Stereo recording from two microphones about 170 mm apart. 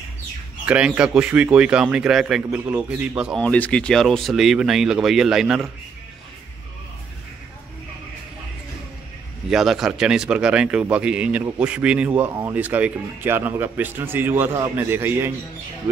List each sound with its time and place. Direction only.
0.7 s a man's voice: 5° right (ahead or behind)
3.3 s a man's voice: 10° left (ahead or behind)
9.5 s a man's voice: centre (ahead or behind)